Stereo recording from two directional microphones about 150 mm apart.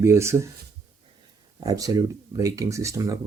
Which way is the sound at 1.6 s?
25° right (ahead or behind).